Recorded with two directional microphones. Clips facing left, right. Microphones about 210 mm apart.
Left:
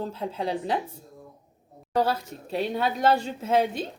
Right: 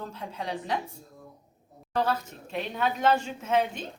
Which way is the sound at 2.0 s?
35° left (ahead or behind).